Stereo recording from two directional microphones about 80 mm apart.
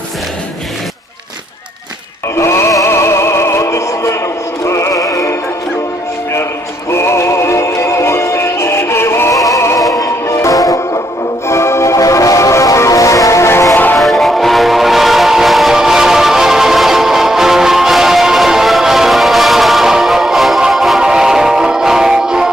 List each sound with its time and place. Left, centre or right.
2.3 s music: left
6.9 s music: left
9.3 s music: left
11.4 s music: left
13.7 s music: left
14.0 s music: centre